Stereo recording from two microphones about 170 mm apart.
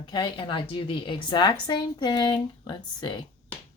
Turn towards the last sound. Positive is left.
turn(degrees=25)  # may be behind; listen again after turning